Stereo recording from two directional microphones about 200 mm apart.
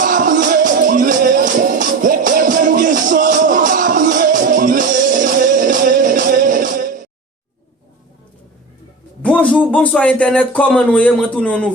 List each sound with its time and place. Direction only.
0.0 s music: 40° right (ahead or behind)
9.2 s a man's voice: 5° left (ahead or behind)